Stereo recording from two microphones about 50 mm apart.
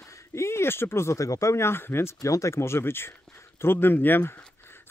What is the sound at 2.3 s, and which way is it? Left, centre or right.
Speech, left.